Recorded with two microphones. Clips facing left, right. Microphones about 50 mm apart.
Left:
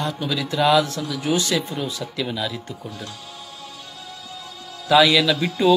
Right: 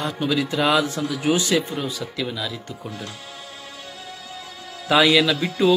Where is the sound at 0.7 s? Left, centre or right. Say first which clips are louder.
Left 1 dB; right.